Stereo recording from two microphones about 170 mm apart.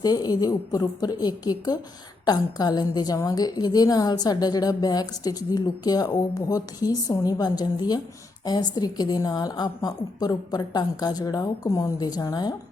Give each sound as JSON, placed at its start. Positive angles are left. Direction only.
{"t": 0.0, "sound": "a woman's voice", "side_deg": 25}